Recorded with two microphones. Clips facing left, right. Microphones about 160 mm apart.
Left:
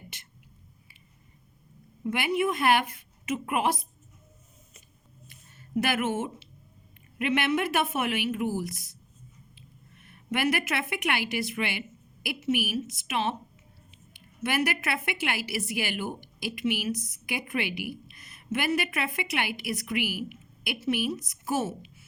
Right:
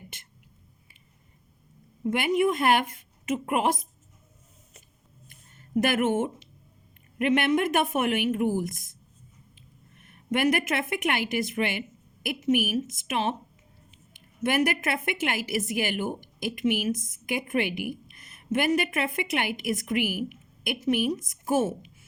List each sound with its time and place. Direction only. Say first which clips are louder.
2.0 s a woman's voice: right 3 dB; 45° right (ahead or behind)
5.3 s a sound: right 3 dB; 45° right (ahead or behind)
7.2 s a woman's voice: right 3 dB; 45° right (ahead or behind)